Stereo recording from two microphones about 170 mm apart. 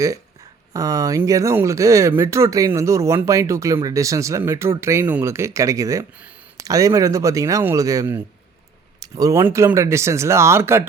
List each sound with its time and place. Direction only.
0.7 s speech: 20° right (ahead or behind)